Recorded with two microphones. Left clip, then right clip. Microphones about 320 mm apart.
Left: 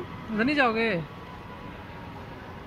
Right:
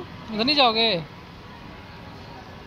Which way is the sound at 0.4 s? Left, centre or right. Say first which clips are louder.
Right 5 dB; centre.